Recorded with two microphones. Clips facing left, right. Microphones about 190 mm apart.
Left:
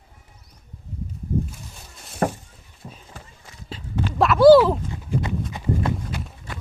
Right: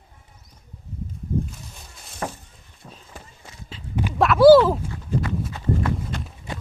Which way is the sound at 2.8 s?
10° left (ahead or behind).